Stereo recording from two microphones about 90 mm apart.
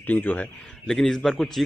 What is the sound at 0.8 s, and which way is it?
Speech, 5° left (ahead or behind).